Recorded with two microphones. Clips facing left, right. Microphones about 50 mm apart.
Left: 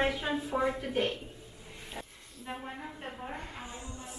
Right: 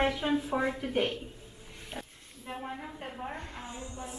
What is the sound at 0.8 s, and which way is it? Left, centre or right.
Speech, centre.